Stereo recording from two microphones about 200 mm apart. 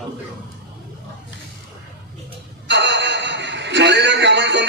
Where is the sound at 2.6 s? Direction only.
60° right (ahead or behind).